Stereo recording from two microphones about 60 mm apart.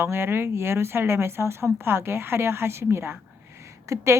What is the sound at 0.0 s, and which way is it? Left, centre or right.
Speech, right.